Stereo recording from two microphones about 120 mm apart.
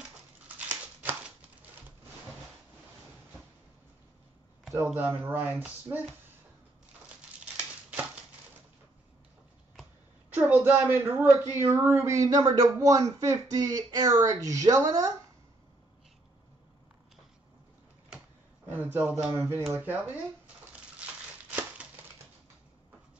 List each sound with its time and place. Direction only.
0.5 s scissors: 15° right (ahead or behind)
4.7 s speech: 15° right (ahead or behind)
10.3 s a woman's voice: 15° right (ahead or behind)
18.7 s speech: 15° right (ahead or behind)
21.0 s crumpling: 10° right (ahead or behind)